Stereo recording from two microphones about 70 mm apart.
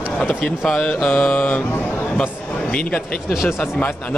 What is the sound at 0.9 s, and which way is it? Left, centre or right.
Speech, centre.